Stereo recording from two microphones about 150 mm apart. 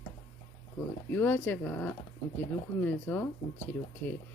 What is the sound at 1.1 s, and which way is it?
Speech, 15° left (ahead or behind).